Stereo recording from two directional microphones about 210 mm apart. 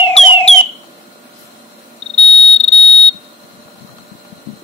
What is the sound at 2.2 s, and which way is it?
Smoke detector, 30° left (ahead or behind).